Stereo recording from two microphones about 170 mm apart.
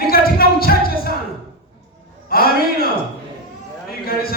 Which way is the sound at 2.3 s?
60° left (ahead or behind).